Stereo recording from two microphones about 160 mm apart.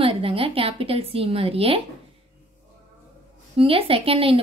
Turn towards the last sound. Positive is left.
turn(degrees=-35)  # may be behind; listen again after turning